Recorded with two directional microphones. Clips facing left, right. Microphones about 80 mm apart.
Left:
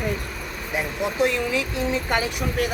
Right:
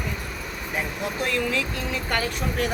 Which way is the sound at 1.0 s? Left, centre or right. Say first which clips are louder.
Left 5 dB; centre.